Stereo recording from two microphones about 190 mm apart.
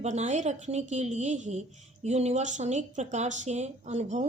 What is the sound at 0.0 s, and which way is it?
A woman's voice, 35° right (ahead or behind).